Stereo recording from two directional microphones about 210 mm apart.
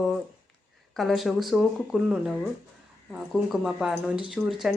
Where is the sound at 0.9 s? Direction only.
Centre (ahead or behind).